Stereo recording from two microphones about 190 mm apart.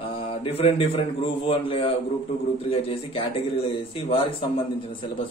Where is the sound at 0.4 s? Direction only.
30° left (ahead or behind).